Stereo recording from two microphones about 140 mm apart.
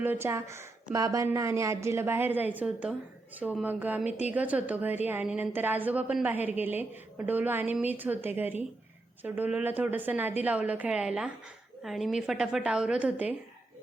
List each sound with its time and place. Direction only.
0.0 s a woman's voice: 15° right (ahead or behind)